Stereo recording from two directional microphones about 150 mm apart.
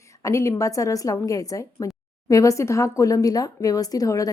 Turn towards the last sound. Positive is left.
turn(degrees=20)  # may be behind; listen again after turning